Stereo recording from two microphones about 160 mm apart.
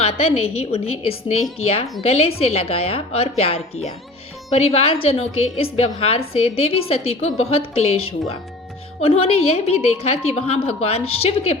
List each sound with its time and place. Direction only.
0.0 s a woman's voice: 40° left (ahead or behind)